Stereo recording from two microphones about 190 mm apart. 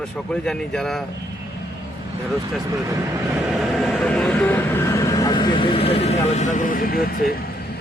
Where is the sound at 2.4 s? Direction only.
15° right (ahead or behind).